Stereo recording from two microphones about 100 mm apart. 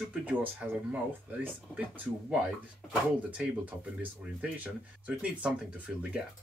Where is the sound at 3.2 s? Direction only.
15° right (ahead or behind).